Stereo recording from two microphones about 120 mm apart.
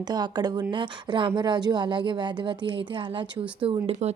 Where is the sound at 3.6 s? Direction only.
60° right (ahead or behind).